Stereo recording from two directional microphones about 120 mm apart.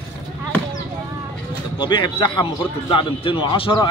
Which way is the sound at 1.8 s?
40° left (ahead or behind).